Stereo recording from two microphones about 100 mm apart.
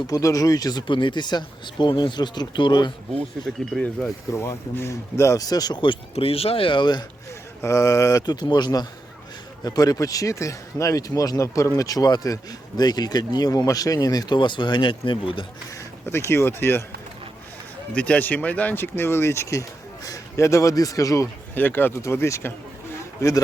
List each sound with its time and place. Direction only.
0.1 s speech: 35° left (ahead or behind)
3.8 s speech: 5° left (ahead or behind)
4.3 s speech: 30° left (ahead or behind); by 6.0 s 45° left (ahead or behind)
6.1 s speech: 80° left; by 7.0 s 50° left (ahead or behind)
7.6 s speech: 30° left (ahead or behind)
8.2 s speech: 45° left (ahead or behind)
15.7 s speech: 25° left (ahead or behind)
17.9 s speech: 15° left (ahead or behind); by 21.2 s 35° left (ahead or behind)
21.5 s speech: 20° left (ahead or behind)